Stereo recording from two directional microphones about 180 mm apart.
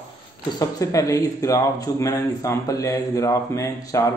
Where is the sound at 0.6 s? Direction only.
20° left (ahead or behind).